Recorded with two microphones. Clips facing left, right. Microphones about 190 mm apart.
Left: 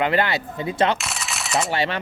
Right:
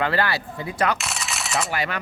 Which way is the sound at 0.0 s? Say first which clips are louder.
Left 2 dB; 20° left (ahead or behind).